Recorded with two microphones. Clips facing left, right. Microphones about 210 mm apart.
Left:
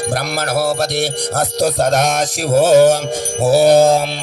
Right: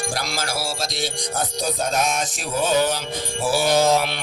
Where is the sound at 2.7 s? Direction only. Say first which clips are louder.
Left 11 dB; 50° left (ahead or behind).